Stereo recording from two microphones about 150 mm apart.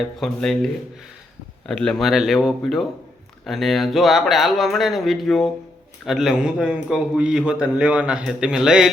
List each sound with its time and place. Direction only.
0.0 s a man's voice: centre (ahead or behind)